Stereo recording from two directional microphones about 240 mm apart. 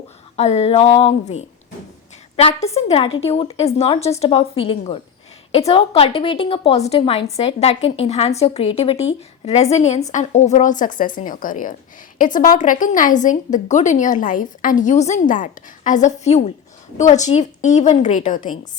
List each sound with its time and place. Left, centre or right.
0.3 s a woman's voice: left